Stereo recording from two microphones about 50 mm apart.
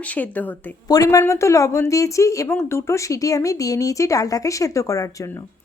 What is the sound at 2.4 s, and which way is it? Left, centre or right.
A woman's voice, left.